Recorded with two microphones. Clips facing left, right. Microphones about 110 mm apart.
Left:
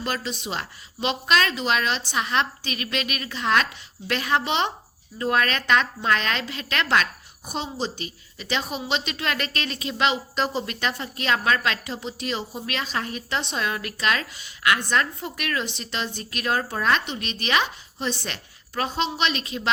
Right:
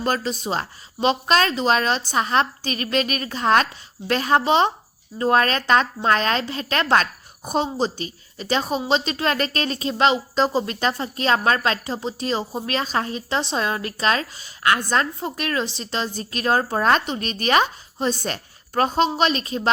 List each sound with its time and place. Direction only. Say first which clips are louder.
0.0 s a woman's voice: right 6 dB; 40° right (ahead or behind)